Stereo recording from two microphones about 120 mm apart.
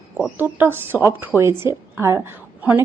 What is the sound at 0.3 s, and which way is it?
A woman's voice, 15° right (ahead or behind).